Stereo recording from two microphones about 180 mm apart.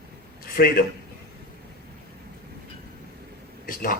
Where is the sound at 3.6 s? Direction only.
50° left (ahead or behind).